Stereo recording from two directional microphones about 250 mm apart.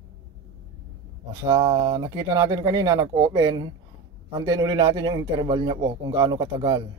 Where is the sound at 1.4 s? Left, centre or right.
Centre.